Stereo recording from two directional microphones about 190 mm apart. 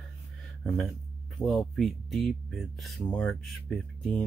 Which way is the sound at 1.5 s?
Centre (ahead or behind).